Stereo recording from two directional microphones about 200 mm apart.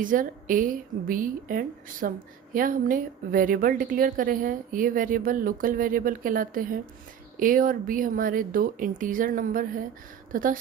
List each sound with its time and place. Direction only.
0.0 s a woman's voice: 40° right (ahead or behind)